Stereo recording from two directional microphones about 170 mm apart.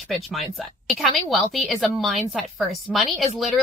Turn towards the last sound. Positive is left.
turn(degrees=0)  # may be behind; listen again after turning